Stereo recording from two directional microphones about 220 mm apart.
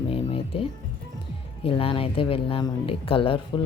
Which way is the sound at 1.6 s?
25° left (ahead or behind).